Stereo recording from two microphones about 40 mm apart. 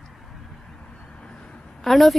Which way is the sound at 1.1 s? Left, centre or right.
Left.